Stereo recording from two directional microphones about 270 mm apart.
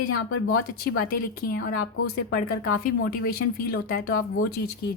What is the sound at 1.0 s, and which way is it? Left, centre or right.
Speech, left.